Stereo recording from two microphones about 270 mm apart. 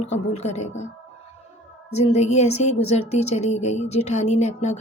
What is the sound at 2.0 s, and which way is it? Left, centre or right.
A woman's voice, left.